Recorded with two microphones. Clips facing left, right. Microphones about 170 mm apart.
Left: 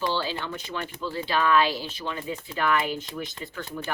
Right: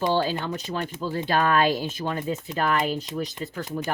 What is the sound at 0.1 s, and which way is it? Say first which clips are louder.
Speech: right 5 dB; 45° right (ahead or behind).